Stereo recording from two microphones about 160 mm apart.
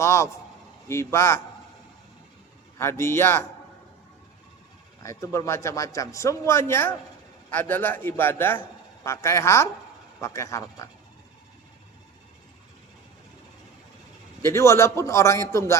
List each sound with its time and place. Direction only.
0.0 s a man's voice: 15° left (ahead or behind)
2.7 s a man's voice: 15° left (ahead or behind)
5.0 s a man's voice: 15° left (ahead or behind)
14.4 s a man's voice: 15° left (ahead or behind)